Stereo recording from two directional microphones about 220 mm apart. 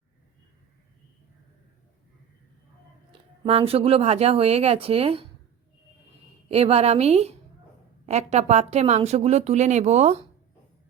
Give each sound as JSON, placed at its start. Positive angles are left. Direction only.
{"t": 3.1, "sound": "speech", "side_deg": -25}
{"t": 6.5, "sound": "speech", "side_deg": -25}